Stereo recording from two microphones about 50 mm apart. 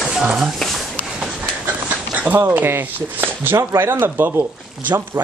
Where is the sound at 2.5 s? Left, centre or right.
Right.